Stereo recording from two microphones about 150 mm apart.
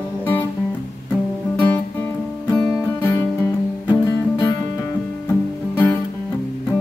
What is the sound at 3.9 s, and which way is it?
Music, 30° left (ahead or behind).